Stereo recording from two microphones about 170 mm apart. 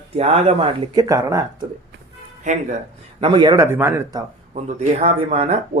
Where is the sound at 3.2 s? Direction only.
30° right (ahead or behind).